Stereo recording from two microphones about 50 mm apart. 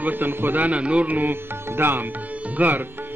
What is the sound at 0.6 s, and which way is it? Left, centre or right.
Speech, right.